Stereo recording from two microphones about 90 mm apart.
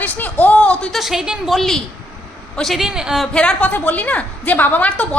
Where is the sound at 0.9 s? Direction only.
5° right (ahead or behind).